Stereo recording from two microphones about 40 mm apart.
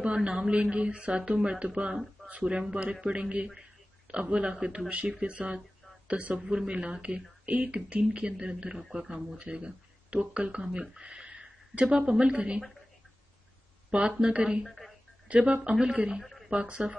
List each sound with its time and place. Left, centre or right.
0.0 s speech: right
13.8 s speech: right
14.7 s a sound: centre
15.2 s speech: right
15.7 s speech: centre
16.2 s a sound: centre
16.4 s speech: right